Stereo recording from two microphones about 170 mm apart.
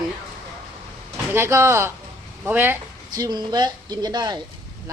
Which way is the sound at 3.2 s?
25° right (ahead or behind).